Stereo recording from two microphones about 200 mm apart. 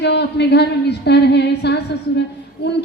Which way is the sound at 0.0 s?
55° left (ahead or behind).